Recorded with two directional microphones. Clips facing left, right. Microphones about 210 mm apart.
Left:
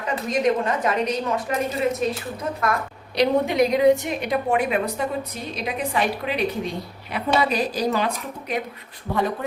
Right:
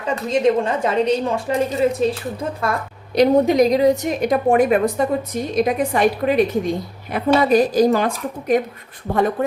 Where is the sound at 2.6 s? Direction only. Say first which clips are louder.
Right 1 dB; 30° right (ahead or behind).